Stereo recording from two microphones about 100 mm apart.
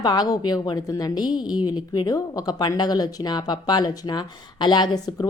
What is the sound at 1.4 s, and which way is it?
Speech, 10° right (ahead or behind).